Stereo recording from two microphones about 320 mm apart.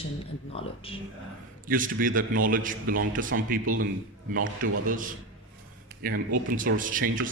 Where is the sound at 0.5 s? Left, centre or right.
Centre.